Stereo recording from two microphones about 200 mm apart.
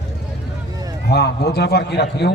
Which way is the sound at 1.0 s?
55° left (ahead or behind).